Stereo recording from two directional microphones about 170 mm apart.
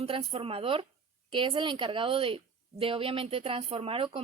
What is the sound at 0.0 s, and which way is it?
A woman's voice, 35° right (ahead or behind).